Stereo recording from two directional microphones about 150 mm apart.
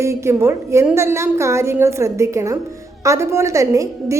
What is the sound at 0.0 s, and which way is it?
A woman's voice, 20° right (ahead or behind).